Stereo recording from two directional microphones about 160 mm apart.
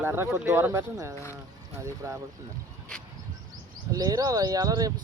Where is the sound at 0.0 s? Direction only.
15° right (ahead or behind).